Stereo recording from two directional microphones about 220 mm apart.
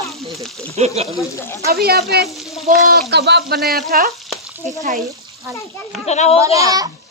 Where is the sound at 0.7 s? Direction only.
30° right (ahead or behind).